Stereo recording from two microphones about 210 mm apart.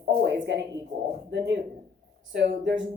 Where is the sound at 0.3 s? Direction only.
55° right (ahead or behind).